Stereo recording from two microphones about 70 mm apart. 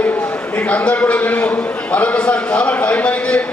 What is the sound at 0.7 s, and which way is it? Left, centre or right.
A man's voice, centre.